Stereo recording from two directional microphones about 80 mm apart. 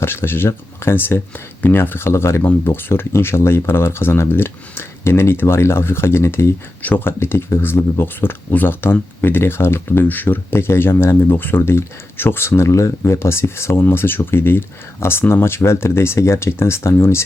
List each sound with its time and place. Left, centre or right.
0.0 s speech: left